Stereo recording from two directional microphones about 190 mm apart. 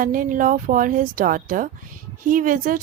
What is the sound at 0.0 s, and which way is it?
A woman's voice, 45° right (ahead or behind).